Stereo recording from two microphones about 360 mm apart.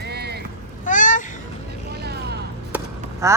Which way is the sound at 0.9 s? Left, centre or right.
Left.